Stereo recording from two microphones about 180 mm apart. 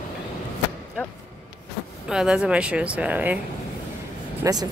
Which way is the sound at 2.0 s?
5° right (ahead or behind).